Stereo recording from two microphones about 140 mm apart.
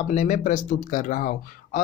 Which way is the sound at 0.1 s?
60° left (ahead or behind).